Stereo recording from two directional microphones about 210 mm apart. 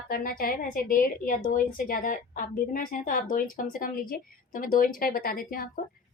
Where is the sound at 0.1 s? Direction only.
45° left (ahead or behind).